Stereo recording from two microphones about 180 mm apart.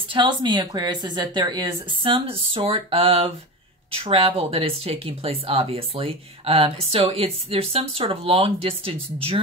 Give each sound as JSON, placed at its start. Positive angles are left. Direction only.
{"t": 0.1, "sound": "a woman's voice", "side_deg": -25}